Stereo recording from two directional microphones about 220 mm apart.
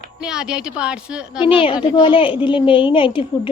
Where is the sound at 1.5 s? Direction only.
25° left (ahead or behind).